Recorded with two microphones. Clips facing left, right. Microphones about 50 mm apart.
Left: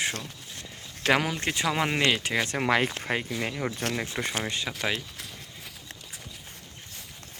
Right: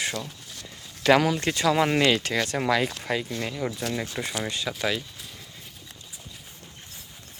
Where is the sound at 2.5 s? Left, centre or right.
Left.